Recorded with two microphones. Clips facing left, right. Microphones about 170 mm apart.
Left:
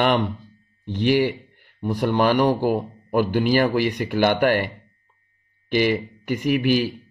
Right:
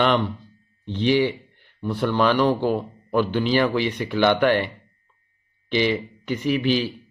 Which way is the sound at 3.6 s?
45° left (ahead or behind).